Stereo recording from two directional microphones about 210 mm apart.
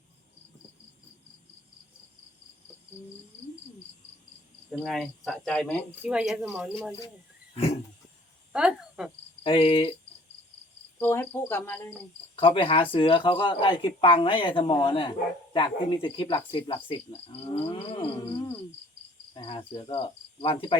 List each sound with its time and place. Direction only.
4.7 s cricket: centre (ahead or behind)
6.0 s cricket: 5° right (ahead or behind)
7.5 s a sound: 25° left (ahead or behind)
8.5 s cricket: 5° right (ahead or behind)
9.4 s speech: 25° left (ahead or behind)
11.0 s cricket: 10° left (ahead or behind)
12.4 s speech: 25° left (ahead or behind)
17.7 s cricket: 25° left (ahead or behind)
19.3 s cricket: 25° left (ahead or behind)